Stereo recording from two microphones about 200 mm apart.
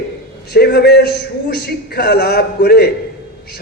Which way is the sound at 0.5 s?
55° left (ahead or behind).